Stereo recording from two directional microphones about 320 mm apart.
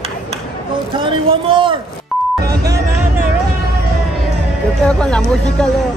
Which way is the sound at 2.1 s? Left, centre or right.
Centre.